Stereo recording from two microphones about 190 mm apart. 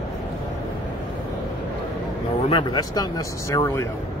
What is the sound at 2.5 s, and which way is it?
Speech, 20° left (ahead or behind).